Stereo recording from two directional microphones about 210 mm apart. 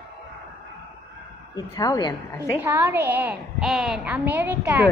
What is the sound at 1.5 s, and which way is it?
Speech, 15° left (ahead or behind).